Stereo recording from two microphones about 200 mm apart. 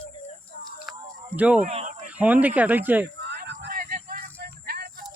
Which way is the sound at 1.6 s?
35° right (ahead or behind).